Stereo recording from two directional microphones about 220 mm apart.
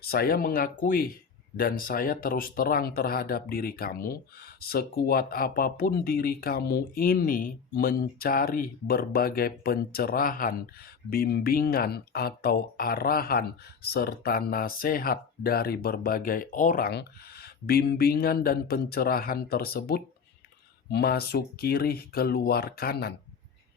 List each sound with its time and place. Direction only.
0.0 s speech: 45° left (ahead or behind)